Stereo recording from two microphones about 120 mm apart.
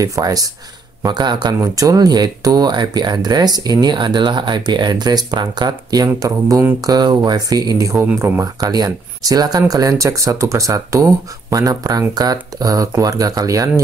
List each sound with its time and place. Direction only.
0.0 s speech: 30° right (ahead or behind)